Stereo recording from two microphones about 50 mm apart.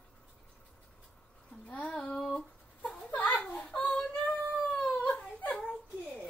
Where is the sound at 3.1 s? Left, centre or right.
Left.